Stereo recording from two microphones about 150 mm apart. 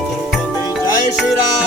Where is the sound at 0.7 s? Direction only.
Centre (ahead or behind).